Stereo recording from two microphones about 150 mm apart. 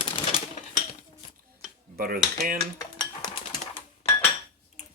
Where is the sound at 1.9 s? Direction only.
75° right (ahead or behind).